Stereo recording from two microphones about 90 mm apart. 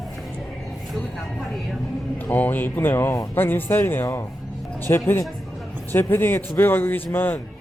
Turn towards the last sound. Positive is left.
turn(degrees=20)  # may be behind; listen again after turning